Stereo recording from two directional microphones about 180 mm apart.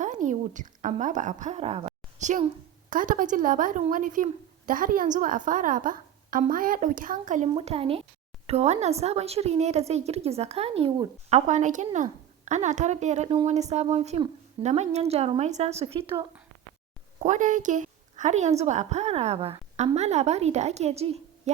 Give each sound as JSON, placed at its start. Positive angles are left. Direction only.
{"t": 0.0, "sound": "a sound", "side_deg": -45}
{"t": 2.9, "sound": "a woman's voice", "side_deg": -50}
{"t": 11.3, "sound": "a woman's voice", "side_deg": -40}
{"t": 17.2, "sound": "a woman's voice", "side_deg": -40}